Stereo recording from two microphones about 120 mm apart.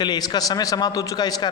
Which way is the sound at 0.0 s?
35° left (ahead or behind).